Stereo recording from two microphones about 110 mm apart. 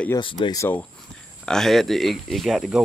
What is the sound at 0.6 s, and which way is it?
Speech, 20° left (ahead or behind).